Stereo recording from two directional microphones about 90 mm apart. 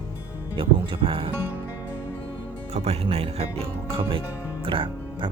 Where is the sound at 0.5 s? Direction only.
75° right (ahead or behind).